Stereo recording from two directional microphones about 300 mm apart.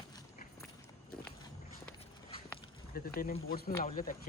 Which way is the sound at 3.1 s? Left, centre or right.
Left.